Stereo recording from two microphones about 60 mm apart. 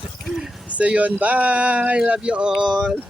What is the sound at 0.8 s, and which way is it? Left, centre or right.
Speech, right.